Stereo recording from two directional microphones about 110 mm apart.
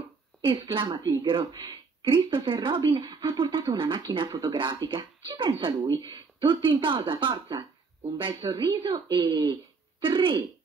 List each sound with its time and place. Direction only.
0.4 s speech: 50° right (ahead or behind)
8.5 s speech: 40° right (ahead or behind)